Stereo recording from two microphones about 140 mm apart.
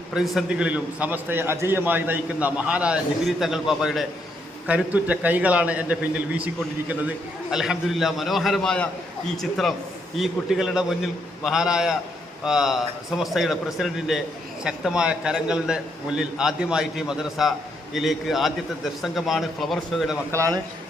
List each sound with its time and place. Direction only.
0.1 s a man's voice: 5° right (ahead or behind)
7.5 s a man's voice: centre (ahead or behind)
20.3 s a man's voice: 20° right (ahead or behind)